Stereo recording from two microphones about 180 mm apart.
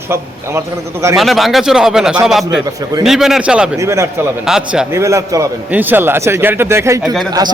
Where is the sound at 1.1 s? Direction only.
Centre (ahead or behind).